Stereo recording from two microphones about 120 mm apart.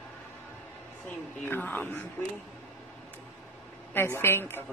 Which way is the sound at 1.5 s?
15° left (ahead or behind).